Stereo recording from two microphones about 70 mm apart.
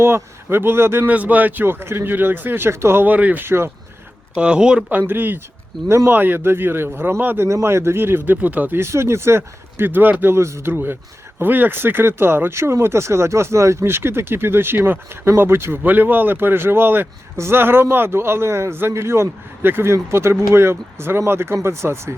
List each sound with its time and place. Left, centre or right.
0.0 s speech: right
1.0 s speech: right
3.1 s speech: right
3.4 s speech: right
4.4 s speech: centre
4.9 s speech: right
7.4 s speech: right
8.8 s speech: right
10.3 s speech: right